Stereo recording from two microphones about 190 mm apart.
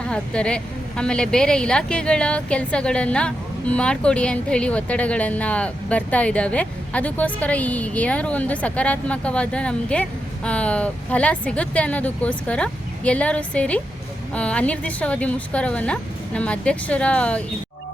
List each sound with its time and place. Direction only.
0.1 s a woman's voice: 5° left (ahead or behind)